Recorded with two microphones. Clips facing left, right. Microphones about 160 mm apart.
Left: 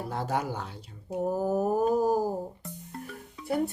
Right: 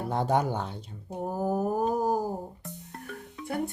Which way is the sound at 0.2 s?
30° right (ahead or behind).